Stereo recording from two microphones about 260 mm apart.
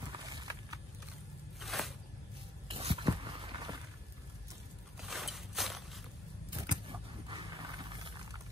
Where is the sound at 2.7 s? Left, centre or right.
Right.